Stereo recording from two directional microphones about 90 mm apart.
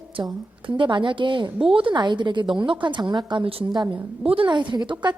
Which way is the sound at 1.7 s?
75° right (ahead or behind).